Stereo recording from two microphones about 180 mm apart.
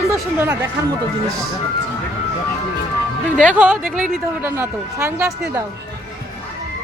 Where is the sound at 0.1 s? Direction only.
10° right (ahead or behind).